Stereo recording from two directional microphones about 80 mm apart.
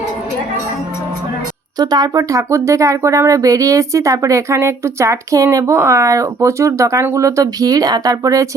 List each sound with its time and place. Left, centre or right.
1.8 s speech: right